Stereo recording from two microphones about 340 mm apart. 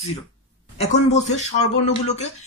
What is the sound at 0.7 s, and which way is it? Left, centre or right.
Speech, centre.